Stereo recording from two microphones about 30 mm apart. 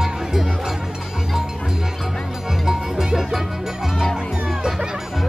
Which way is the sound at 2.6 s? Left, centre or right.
Centre.